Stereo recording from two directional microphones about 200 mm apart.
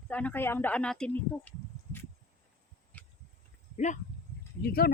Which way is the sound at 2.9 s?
10° left (ahead or behind).